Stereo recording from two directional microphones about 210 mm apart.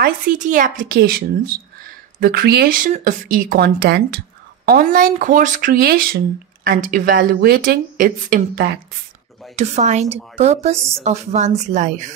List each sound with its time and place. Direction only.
0.0 s speech: 40° right (ahead or behind)
9.6 s speech: 35° right (ahead or behind)